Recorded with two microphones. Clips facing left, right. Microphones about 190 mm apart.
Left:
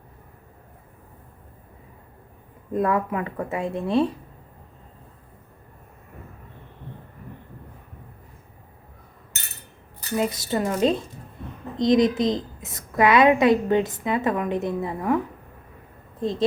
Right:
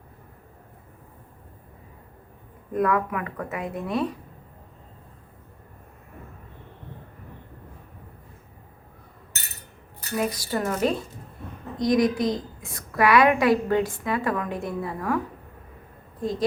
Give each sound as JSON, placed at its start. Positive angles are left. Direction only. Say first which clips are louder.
{"t": 2.7, "sound": "a woman's voice", "louder": "left 1 dB", "side_deg": 25}
{"t": 10.2, "sound": "a woman's voice", "louder": "left 2 dB", "side_deg": 25}
{"t": 16.2, "sound": "a woman's voice", "louder": "left 2 dB", "side_deg": 25}